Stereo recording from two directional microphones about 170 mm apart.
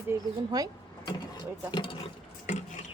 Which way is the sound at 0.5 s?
20° right (ahead or behind).